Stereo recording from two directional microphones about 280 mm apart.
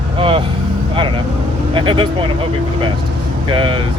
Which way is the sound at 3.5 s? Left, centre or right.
Centre.